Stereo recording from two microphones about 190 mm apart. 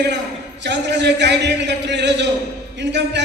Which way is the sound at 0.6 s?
65° right (ahead or behind).